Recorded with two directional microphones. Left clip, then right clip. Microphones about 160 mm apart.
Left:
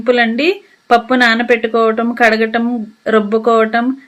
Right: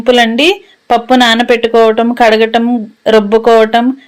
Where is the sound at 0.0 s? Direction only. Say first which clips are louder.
Right 5 dB; 25° right (ahead or behind).